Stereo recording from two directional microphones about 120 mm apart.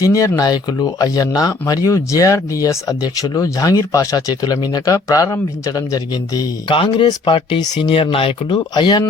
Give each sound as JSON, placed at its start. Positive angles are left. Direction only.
{"t": 0.0, "sound": "speech", "side_deg": 30}
{"t": 6.7, "sound": "speech", "side_deg": 45}